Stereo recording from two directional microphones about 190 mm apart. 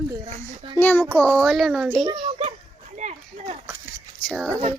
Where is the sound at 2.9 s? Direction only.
40° right (ahead or behind).